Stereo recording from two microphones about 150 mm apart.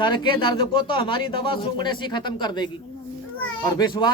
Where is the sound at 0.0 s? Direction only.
30° left (ahead or behind).